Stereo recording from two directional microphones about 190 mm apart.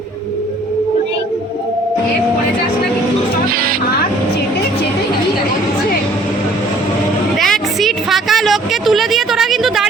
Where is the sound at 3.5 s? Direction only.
50° right (ahead or behind).